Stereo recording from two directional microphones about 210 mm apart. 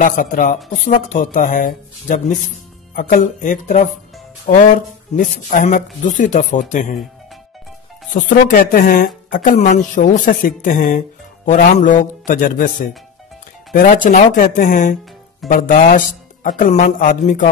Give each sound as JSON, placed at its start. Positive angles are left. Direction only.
{"t": 0.0, "sound": "a woman's voice", "side_deg": 40}
{"t": 8.1, "sound": "a woman's voice", "side_deg": 40}
{"t": 13.7, "sound": "a woman's voice", "side_deg": 40}